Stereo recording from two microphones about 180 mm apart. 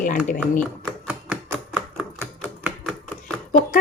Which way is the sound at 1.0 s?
5° right (ahead or behind).